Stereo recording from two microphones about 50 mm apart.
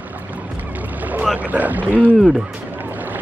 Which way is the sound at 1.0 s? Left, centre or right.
Right.